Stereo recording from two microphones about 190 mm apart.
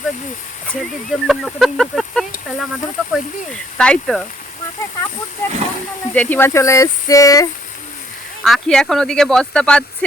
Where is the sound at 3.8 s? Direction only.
5° left (ahead or behind).